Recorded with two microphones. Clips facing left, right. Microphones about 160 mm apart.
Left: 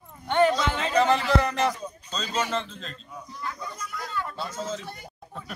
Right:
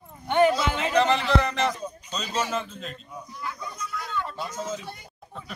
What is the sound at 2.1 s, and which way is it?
Speech, 10° right (ahead or behind).